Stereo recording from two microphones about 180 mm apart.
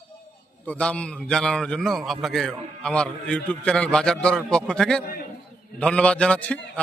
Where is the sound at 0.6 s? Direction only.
5° left (ahead or behind).